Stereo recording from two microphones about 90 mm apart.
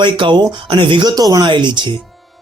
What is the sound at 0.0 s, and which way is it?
Speech, 65° right (ahead or behind).